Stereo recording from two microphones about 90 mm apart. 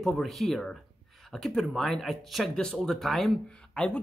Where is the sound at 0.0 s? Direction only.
Centre (ahead or behind).